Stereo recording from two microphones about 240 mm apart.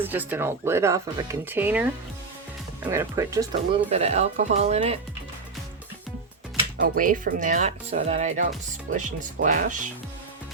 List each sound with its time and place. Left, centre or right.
0.0 s speech: centre
3.8 s speech: right
6.8 s speech: right